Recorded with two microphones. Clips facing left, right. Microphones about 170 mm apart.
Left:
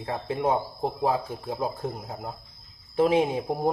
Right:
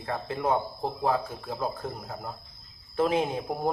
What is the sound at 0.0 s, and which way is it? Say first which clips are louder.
Speech: left 3 dB; 15° left (ahead or behind).